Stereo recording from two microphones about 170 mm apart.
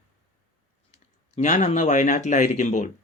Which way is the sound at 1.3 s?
45° left (ahead or behind).